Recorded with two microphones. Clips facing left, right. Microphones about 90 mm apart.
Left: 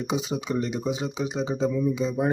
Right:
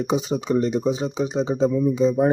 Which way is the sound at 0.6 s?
35° right (ahead or behind).